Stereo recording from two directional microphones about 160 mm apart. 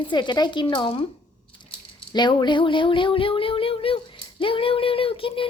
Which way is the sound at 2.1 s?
25° left (ahead or behind).